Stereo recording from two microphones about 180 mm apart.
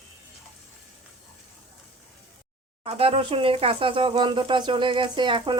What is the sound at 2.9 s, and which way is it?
Speech, 35° right (ahead or behind).